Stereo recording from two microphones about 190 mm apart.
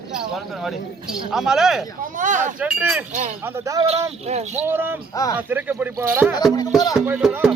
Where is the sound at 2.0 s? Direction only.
40° right (ahead or behind).